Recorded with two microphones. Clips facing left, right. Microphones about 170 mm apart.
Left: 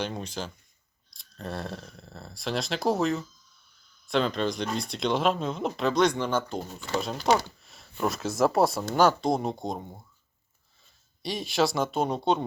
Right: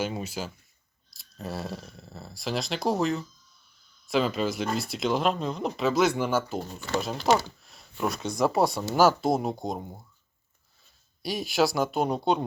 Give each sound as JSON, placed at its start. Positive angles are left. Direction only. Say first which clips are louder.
{"t": 0.0, "sound": "speech", "louder": "right 2 dB", "side_deg": -5}
{"t": 11.2, "sound": "speech", "louder": "right 1 dB", "side_deg": 0}